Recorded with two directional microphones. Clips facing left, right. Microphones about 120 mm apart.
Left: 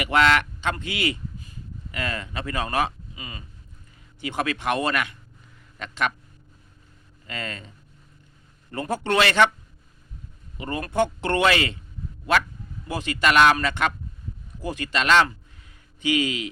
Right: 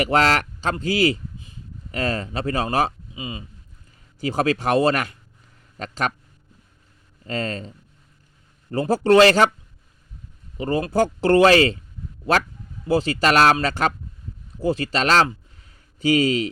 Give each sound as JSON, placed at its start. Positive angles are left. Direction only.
{"t": 0.0, "sound": "speech", "side_deg": -35}
{"t": 3.2, "sound": "speech", "side_deg": -20}
{"t": 4.2, "sound": "speech", "side_deg": -35}
{"t": 7.3, "sound": "speech", "side_deg": -35}
{"t": 8.7, "sound": "speech", "side_deg": -35}
{"t": 10.6, "sound": "speech", "side_deg": -30}
{"t": 12.9, "sound": "speech", "side_deg": -35}